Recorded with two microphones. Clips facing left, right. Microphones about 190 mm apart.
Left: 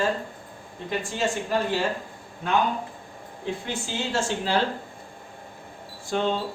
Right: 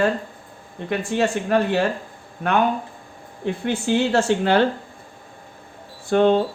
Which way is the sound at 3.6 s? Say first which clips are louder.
Right 10 dB; 60° right (ahead or behind).